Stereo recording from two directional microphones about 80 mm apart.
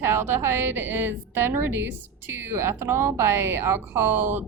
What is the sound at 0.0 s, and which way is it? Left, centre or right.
A woman's voice, right.